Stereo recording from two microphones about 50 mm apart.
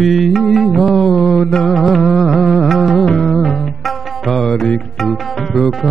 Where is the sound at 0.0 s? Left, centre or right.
Centre.